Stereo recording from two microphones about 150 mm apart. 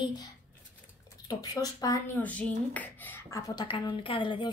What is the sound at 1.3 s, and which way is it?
Speech, 25° left (ahead or behind).